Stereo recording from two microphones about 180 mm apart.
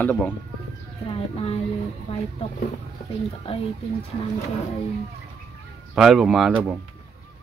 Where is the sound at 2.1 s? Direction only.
35° left (ahead or behind).